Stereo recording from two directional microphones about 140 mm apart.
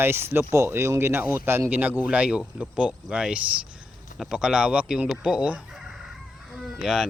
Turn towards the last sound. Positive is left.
turn(degrees=-5)  # may be behind; listen again after turning